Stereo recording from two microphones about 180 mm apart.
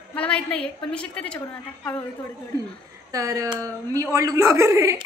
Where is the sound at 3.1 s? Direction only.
20° right (ahead or behind).